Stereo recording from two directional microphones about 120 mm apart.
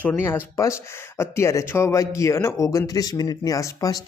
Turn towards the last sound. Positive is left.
turn(degrees=30)  # may be behind; listen again after turning